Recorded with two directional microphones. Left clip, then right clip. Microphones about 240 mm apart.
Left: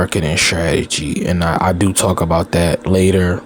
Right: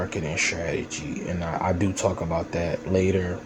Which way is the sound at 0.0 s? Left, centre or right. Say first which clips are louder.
Left 10 dB; left.